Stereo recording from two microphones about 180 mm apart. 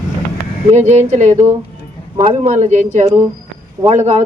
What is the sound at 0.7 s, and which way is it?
Speech, 40° right (ahead or behind).